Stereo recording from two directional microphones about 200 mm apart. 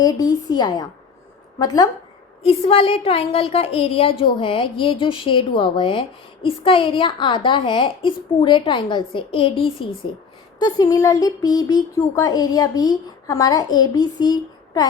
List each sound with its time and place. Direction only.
0.0 s a woman's voice: 15° left (ahead or behind)
2.4 s a woman's voice: 30° left (ahead or behind)
10.6 s a sound: 20° left (ahead or behind)
11.9 s a woman's voice: 20° left (ahead or behind)